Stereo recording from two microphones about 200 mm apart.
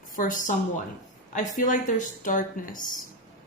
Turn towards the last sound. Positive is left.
turn(degrees=40)  # may be behind; listen again after turning